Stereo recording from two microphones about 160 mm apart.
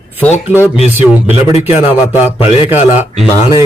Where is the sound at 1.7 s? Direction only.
35° left (ahead or behind).